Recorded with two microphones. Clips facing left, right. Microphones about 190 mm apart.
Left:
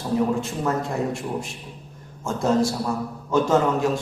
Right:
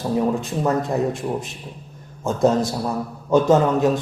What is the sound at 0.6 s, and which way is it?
A man's voice, 20° right (ahead or behind).